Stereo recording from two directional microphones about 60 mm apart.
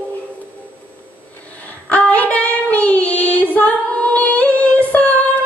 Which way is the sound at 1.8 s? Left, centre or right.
Left.